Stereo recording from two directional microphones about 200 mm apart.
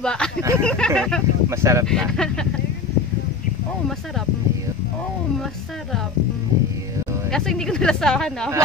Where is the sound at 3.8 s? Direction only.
Centre (ahead or behind).